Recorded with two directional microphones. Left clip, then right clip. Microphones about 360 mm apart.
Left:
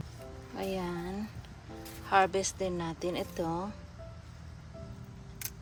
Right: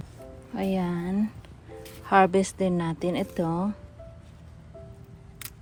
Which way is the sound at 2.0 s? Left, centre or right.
Centre.